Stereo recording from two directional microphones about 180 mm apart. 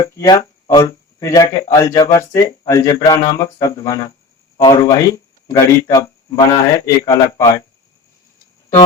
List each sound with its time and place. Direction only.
0.0 s speech: 20° left (ahead or behind)